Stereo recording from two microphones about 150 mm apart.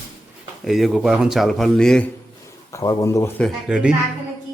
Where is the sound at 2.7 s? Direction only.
20° left (ahead or behind).